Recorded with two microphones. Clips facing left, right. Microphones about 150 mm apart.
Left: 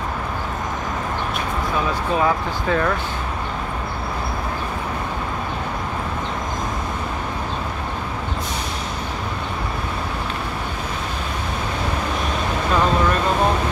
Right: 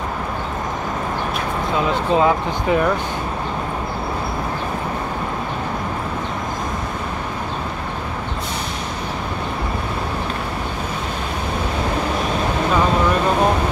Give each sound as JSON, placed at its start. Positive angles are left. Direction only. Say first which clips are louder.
{"t": 1.8, "sound": "speech", "louder": "right 4 dB", "side_deg": -20}